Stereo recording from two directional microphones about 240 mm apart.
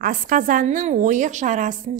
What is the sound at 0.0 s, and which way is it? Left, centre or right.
A woman's voice, right.